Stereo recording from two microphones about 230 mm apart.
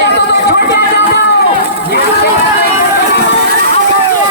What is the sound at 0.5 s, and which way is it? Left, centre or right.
Music, left.